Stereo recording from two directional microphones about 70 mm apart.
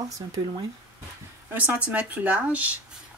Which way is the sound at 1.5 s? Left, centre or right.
Right.